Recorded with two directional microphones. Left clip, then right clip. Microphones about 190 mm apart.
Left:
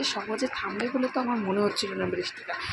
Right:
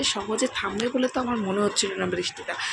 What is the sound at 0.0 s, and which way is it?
Speech, 15° right (ahead or behind).